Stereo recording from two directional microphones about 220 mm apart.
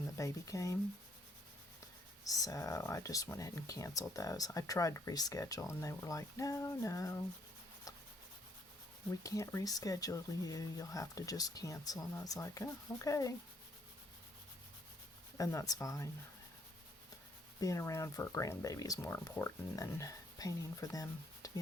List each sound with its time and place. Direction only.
0.2 s speech: 15° left (ahead or behind)
2.2 s speech: 15° left (ahead or behind)
9.2 s speech: 15° left (ahead or behind)
15.4 s speech: 15° left (ahead or behind)
17.6 s speech: 15° left (ahead or behind)